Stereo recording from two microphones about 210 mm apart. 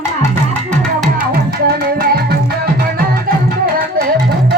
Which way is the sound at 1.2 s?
45° right (ahead or behind).